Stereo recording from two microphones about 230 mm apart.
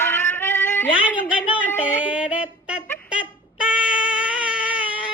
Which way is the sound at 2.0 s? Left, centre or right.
Centre.